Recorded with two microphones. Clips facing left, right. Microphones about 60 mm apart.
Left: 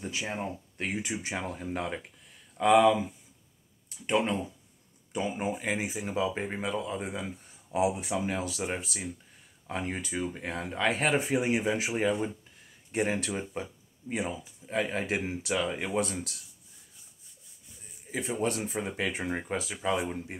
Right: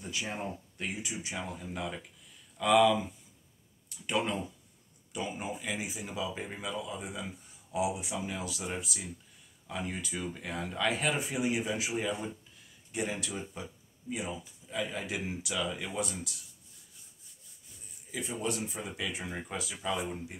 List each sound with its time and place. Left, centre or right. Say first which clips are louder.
0.7 s speech: left 7 dB; left
2.5 s speech: left 3 dB; left
18.1 s speech: left 4 dB; left